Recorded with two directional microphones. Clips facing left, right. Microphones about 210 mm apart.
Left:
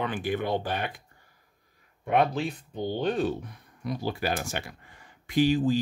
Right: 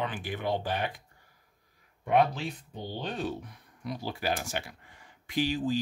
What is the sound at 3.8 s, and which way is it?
Speech, 50° left (ahead or behind).